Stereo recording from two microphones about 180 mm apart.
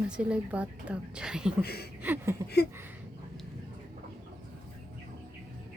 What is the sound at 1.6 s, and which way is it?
Speech, 60° left (ahead or behind).